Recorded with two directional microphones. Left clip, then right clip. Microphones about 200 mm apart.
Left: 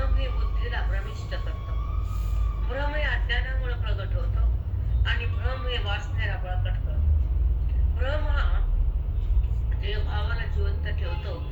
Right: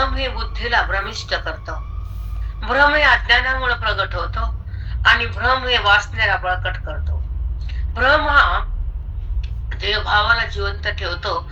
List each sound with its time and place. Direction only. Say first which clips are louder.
0.0 s speech: right 15 dB; 50° right (ahead or behind)
2.6 s a man's voice: right 17 dB; 50° right (ahead or behind)
7.9 s a man's voice: right 19 dB; 50° right (ahead or behind)
9.7 s a man's voice: right 18 dB; 50° right (ahead or behind)